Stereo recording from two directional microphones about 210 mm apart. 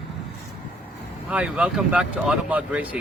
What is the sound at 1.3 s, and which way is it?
Speech, 5° right (ahead or behind).